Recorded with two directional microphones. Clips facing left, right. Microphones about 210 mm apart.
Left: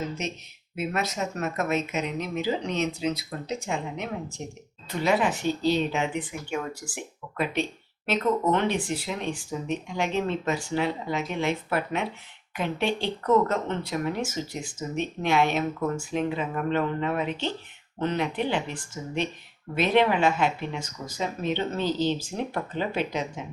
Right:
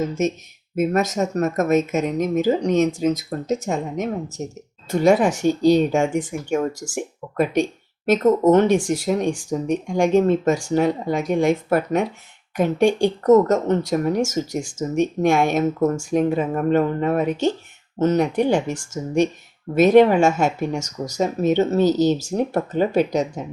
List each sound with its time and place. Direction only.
0.1 s speech: 45° right (ahead or behind)